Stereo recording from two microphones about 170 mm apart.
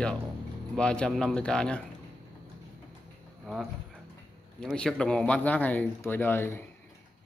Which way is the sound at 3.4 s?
Centre (ahead or behind).